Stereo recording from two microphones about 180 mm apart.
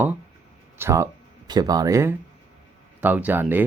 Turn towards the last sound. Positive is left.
turn(degrees=-10)  # may be behind; listen again after turning